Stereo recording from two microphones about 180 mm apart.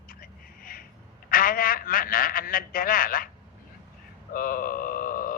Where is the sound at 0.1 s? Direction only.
55° left (ahead or behind).